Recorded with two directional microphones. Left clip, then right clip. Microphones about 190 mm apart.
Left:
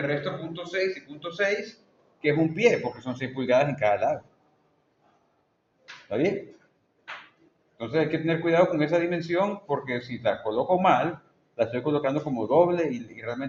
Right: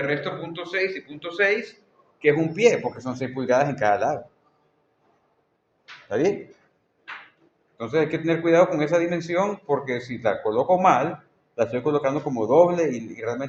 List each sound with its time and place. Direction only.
0.1 s a man's voice: 65° right (ahead or behind)
2.2 s a man's voice: 45° right (ahead or behind)
7.8 s a man's voice: 50° right (ahead or behind)